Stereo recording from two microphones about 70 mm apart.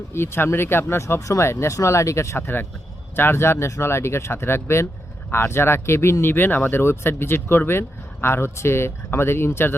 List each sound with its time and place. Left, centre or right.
0.1 s speech: left